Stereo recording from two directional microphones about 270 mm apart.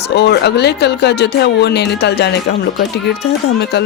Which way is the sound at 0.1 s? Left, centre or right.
Left.